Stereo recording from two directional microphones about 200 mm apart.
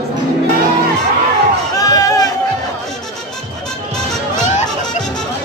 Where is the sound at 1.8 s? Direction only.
15° left (ahead or behind).